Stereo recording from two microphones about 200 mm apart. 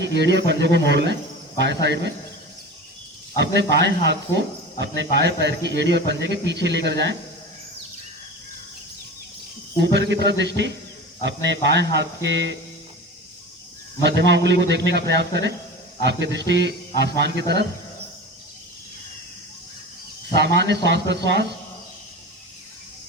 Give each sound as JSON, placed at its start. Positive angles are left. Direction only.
{"t": 0.0, "sound": "speech", "side_deg": -60}
{"t": 3.3, "sound": "speech", "side_deg": -60}
{"t": 9.7, "sound": "speech", "side_deg": -60}
{"t": 14.0, "sound": "speech", "side_deg": -60}
{"t": 20.3, "sound": "speech", "side_deg": -60}